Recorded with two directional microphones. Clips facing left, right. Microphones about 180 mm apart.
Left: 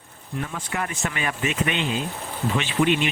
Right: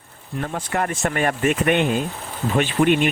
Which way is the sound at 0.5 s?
50° right (ahead or behind).